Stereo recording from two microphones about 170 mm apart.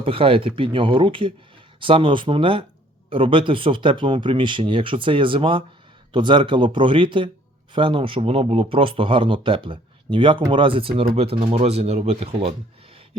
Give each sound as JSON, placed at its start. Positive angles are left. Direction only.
{"t": 0.0, "sound": "speech", "side_deg": -30}